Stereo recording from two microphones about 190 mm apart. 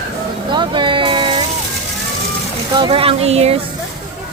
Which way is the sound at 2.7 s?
25° right (ahead or behind).